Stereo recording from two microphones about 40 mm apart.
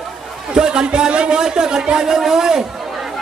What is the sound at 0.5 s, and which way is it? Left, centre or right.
A woman's voice, right.